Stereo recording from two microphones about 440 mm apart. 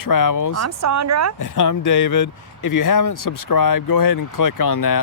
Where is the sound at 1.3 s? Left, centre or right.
Left.